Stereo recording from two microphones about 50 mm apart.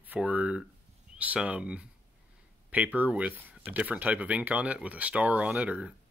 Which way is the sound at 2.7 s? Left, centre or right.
Right.